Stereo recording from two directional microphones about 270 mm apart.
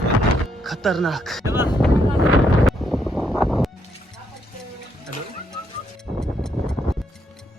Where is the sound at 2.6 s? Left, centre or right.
Centre.